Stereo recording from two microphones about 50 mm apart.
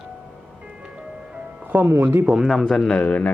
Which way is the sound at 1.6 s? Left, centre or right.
Right.